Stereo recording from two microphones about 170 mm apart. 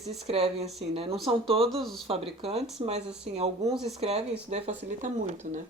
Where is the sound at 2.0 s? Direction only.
35° right (ahead or behind).